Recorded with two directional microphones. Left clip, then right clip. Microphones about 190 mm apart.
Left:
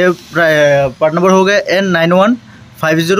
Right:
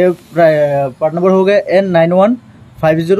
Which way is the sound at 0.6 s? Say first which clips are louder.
Left 3 dB; 20° left (ahead or behind).